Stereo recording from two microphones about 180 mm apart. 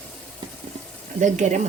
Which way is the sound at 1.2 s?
45° right (ahead or behind).